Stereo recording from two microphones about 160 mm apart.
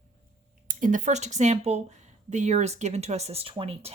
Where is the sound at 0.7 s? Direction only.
55° right (ahead or behind).